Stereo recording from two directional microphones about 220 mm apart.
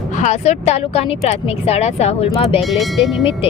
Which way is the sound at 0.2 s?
30° left (ahead or behind).